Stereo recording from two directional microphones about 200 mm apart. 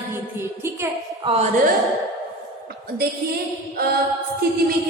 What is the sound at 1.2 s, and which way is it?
Speech, 30° right (ahead or behind).